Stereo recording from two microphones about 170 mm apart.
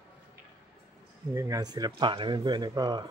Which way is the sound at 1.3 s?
20° right (ahead or behind).